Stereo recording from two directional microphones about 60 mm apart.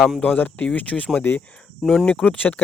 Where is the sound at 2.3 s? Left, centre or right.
Left.